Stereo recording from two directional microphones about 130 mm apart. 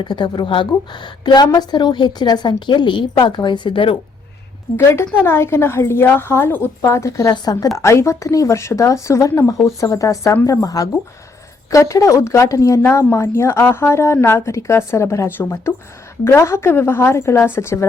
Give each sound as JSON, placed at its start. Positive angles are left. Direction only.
{"t": 0.0, "sound": "a woman's voice", "side_deg": 35}
{"t": 4.8, "sound": "speech", "side_deg": 20}